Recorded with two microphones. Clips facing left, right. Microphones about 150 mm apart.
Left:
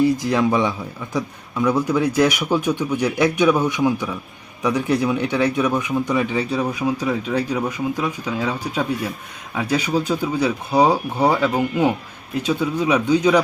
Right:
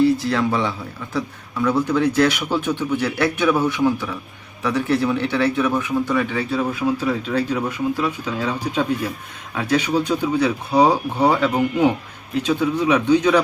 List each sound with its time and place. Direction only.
0.0 s a man's voice: 15° left (ahead or behind)